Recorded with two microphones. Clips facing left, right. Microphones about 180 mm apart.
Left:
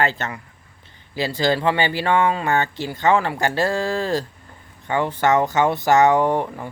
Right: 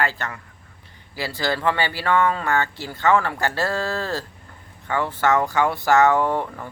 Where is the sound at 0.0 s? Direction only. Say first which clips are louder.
Left 3 dB; 20° left (ahead or behind).